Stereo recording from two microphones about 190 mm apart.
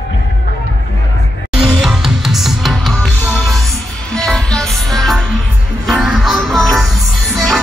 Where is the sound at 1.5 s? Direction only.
5° right (ahead or behind).